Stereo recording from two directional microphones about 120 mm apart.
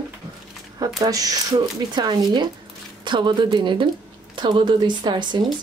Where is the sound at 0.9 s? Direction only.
30° right (ahead or behind).